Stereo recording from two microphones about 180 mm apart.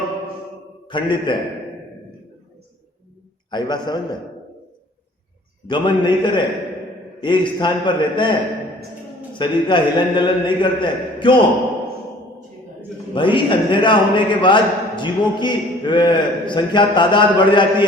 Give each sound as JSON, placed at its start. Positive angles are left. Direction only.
{"t": 0.9, "sound": "a man's voice", "side_deg": 25}
{"t": 3.5, "sound": "a man's voice", "side_deg": 25}
{"t": 5.6, "sound": "a man's voice", "side_deg": 25}
{"t": 9.4, "sound": "a man's voice", "side_deg": 25}
{"t": 13.1, "sound": "a man's voice", "side_deg": 25}